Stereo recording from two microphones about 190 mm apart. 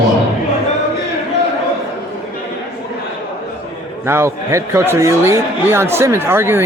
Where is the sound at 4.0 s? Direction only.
15° right (ahead or behind).